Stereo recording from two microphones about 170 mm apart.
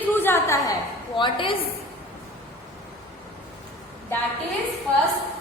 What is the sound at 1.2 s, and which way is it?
Speech, 30° left (ahead or behind).